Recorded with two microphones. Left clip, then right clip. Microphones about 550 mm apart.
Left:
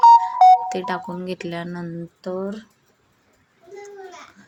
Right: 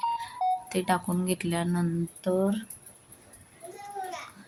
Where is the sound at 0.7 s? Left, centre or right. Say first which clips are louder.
Left 3 dB; right.